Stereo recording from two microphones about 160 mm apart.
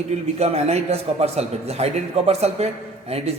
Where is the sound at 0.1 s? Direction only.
40° right (ahead or behind).